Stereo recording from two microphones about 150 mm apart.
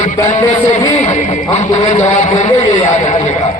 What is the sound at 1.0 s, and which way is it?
A man's voice, 50° left (ahead or behind).